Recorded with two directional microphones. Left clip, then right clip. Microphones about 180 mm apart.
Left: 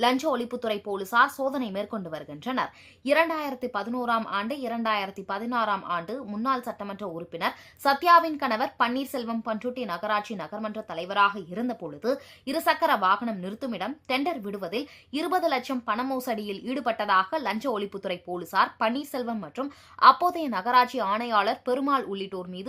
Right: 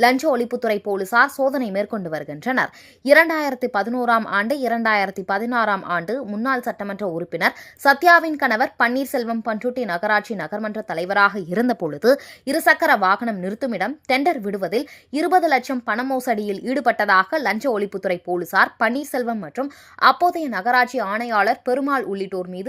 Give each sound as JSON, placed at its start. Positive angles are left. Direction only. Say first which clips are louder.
{"t": 0.0, "sound": "speech", "louder": "right 8 dB", "side_deg": -30}
{"t": 9.2, "sound": "speech", "louder": "right 7 dB", "side_deg": -20}